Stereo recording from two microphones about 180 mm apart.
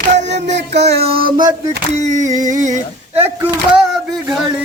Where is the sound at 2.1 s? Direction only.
20° right (ahead or behind).